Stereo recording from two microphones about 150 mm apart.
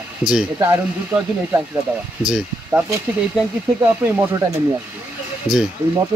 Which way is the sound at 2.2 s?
5° right (ahead or behind).